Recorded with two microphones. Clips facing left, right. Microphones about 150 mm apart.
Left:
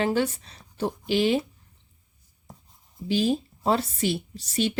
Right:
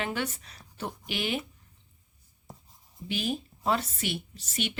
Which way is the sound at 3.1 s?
30° left (ahead or behind).